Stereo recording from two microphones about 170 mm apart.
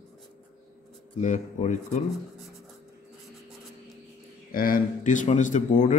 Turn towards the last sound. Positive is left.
turn(degrees=45)  # may be behind; listen again after turning